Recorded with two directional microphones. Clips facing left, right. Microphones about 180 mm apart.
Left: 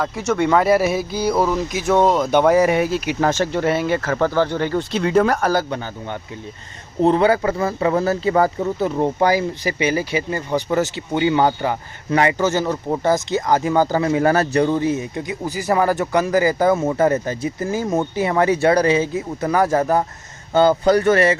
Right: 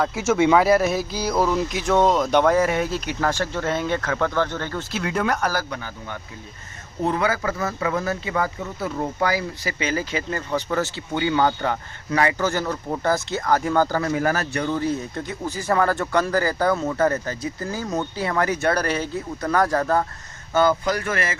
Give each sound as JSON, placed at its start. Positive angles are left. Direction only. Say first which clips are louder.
{"t": 0.0, "sound": "speech", "louder": "even", "side_deg": 0}
{"t": 4.9, "sound": "speech", "louder": "left 6 dB", "side_deg": 25}
{"t": 8.8, "sound": "speech", "louder": "left 5 dB", "side_deg": 25}
{"t": 14.8, "sound": "speech", "louder": "left 4 dB", "side_deg": 15}